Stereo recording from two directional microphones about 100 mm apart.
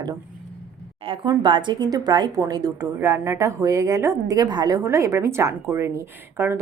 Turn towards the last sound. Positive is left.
turn(degrees=-25)  # may be behind; listen again after turning